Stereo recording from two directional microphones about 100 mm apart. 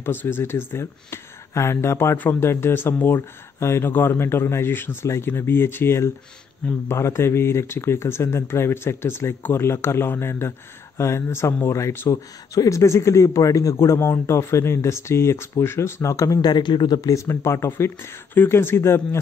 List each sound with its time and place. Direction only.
0.0 s speech: 20° left (ahead or behind)
16.3 s speech: 45° left (ahead or behind); by 19.0 s 25° left (ahead or behind)